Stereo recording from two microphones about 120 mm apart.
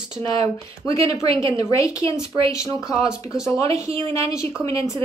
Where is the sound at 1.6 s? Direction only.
25° left (ahead or behind).